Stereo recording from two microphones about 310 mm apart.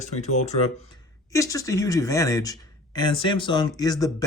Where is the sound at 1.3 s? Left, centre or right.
Centre.